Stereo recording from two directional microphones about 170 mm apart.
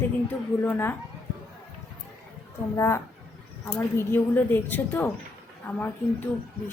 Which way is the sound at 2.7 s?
15° left (ahead or behind).